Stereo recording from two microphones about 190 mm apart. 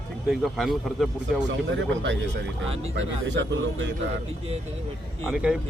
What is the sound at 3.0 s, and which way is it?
Speech, 75° right (ahead or behind).